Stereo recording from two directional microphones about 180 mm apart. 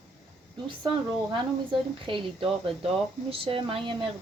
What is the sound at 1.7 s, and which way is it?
Speech, 30° right (ahead or behind).